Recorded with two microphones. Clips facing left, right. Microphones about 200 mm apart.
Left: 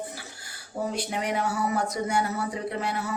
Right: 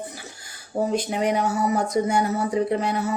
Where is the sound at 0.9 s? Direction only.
20° right (ahead or behind).